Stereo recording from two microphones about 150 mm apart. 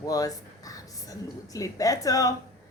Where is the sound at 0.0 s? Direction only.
25° left (ahead or behind).